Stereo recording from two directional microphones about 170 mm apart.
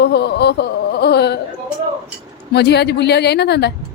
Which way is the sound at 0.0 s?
75° left (ahead or behind).